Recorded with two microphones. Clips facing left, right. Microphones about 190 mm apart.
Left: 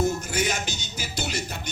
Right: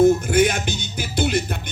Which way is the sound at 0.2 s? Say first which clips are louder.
Right 9 dB; 55° right (ahead or behind).